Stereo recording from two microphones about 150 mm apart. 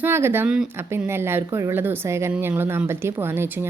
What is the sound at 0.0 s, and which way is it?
Speech, 15° right (ahead or behind).